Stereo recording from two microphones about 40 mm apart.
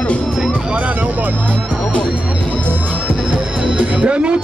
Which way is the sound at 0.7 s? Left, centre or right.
Right.